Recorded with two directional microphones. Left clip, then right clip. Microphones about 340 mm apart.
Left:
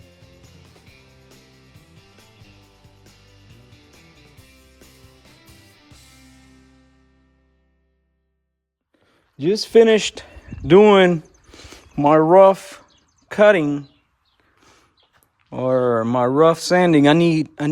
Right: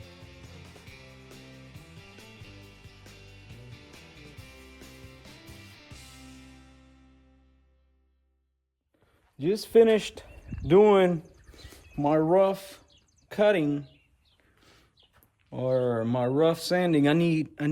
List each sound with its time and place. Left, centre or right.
0.4 s music: centre
3.7 s music: centre
9.4 s speech: left
14.6 s a sound: centre
15.5 s speech: centre